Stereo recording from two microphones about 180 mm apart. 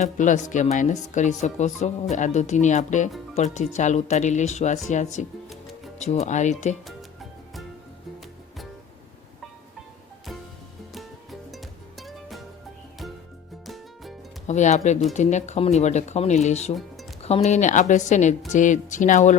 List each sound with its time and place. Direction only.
0.0 s a woman's voice: 45° left (ahead or behind)
6.8 s music: centre (ahead or behind)
10.9 s music: centre (ahead or behind)
13.7 s music: centre (ahead or behind)
14.4 s a woman's voice: 40° left (ahead or behind)